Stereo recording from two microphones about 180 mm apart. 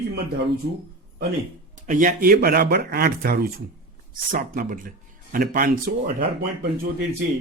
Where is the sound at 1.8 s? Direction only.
45° right (ahead or behind).